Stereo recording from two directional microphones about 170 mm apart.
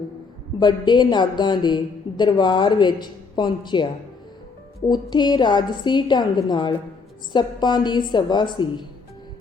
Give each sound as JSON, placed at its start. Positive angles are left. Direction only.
{"t": 0.6, "sound": "a woman's voice", "side_deg": 25}
{"t": 4.9, "sound": "a woman's voice", "side_deg": 25}